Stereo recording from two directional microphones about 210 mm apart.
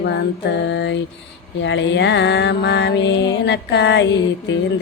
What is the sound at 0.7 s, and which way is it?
Music, 55° left (ahead or behind).